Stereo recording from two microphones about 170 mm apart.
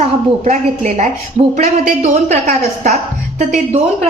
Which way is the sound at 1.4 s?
40° right (ahead or behind).